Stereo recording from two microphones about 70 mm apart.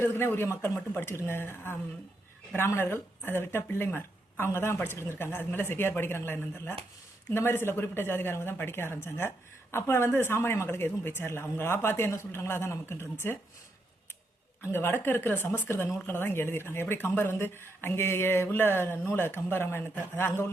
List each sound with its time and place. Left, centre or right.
0.0 s speech: left
14.7 s speech: left